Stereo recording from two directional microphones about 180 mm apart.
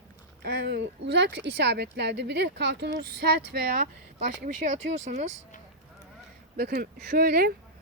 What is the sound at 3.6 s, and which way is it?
Speech, 55° right (ahead or behind).